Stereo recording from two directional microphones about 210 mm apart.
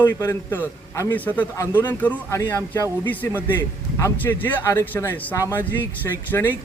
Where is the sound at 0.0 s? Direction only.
10° left (ahead or behind).